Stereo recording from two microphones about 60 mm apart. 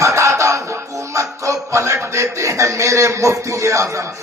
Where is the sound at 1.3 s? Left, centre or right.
Right.